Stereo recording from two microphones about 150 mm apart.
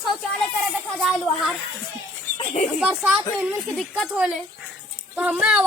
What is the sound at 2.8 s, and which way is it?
A woman's voice, 5° right (ahead or behind).